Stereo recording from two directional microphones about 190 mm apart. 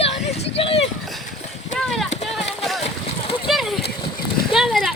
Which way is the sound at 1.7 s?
Centre (ahead or behind).